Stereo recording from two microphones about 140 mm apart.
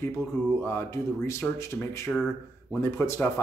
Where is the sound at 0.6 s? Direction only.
15° left (ahead or behind).